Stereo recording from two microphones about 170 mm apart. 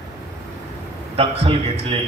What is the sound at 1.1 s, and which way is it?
Speech, 35° right (ahead or behind).